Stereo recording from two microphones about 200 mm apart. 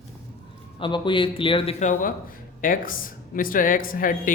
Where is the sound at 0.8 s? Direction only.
25° left (ahead or behind).